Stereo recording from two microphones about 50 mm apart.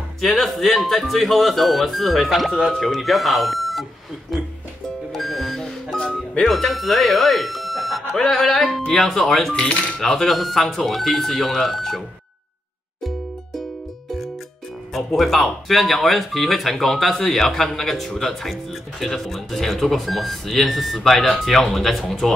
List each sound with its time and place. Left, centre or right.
0.2 s speech: centre
5.1 s music: centre
5.9 s music: centre
6.4 s speech: centre
9.5 s speech: left
9.9 s speech: centre
15.0 s speech: centre